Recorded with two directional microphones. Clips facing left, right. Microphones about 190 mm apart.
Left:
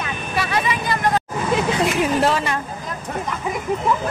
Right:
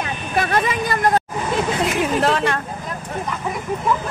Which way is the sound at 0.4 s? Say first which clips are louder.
Right 3 dB; 50° right (ahead or behind).